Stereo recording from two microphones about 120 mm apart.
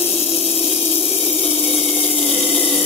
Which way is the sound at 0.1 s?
55° left (ahead or behind).